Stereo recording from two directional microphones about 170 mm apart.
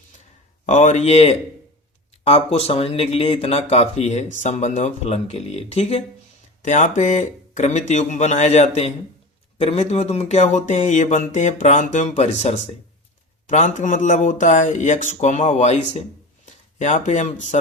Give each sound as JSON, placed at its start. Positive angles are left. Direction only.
{"t": 0.6, "sound": "speech", "side_deg": 45}